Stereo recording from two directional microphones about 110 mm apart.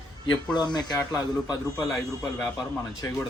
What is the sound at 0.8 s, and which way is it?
Speech, 35° left (ahead or behind).